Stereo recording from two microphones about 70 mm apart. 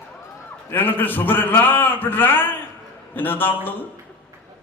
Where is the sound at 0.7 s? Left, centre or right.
Left.